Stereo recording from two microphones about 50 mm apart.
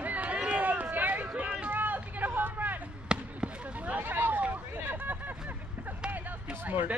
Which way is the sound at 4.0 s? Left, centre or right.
Right.